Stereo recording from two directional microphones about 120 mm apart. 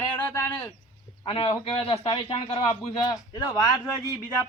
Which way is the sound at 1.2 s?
50° left (ahead or behind).